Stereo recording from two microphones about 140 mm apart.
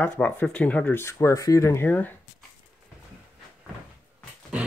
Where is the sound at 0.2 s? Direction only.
10° left (ahead or behind).